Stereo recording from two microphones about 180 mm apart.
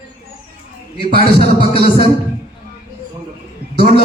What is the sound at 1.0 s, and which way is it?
Music, 60° right (ahead or behind).